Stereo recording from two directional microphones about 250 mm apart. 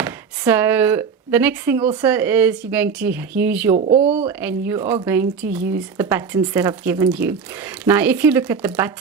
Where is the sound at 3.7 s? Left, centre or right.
Right.